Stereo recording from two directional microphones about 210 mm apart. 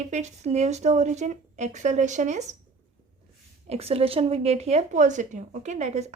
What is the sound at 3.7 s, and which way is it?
A woman's voice, 30° right (ahead or behind).